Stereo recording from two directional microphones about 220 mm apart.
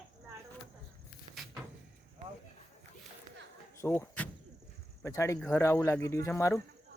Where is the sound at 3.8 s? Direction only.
10° left (ahead or behind).